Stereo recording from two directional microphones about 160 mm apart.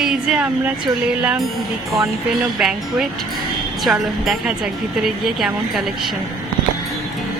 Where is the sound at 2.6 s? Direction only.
5° right (ahead or behind).